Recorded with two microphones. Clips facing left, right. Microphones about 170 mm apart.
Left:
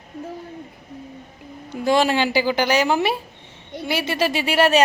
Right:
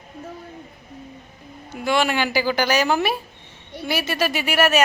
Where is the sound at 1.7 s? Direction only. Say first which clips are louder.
Left 3 dB; 35° left (ahead or behind).